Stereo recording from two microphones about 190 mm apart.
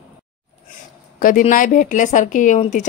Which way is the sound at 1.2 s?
45° left (ahead or behind).